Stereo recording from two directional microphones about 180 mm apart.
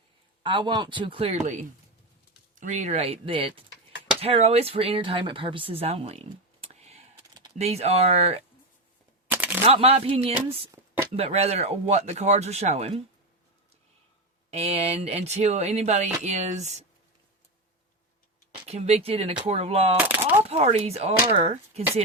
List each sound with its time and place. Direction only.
0.4 s speech: 25° right (ahead or behind)
9.3 s a sound: 10° right (ahead or behind)
9.6 s speech: 30° right (ahead or behind)
10.3 s speech: 10° right (ahead or behind)
11.2 s speech: 35° right (ahead or behind)
14.5 s speech: 35° right (ahead or behind)
18.5 s speech: 35° right (ahead or behind)
20.0 s speech: 10° right (ahead or behind)
20.5 s speech: 35° right (ahead or behind)